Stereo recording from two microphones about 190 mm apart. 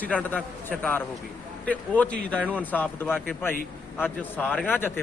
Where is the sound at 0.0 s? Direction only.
10° left (ahead or behind).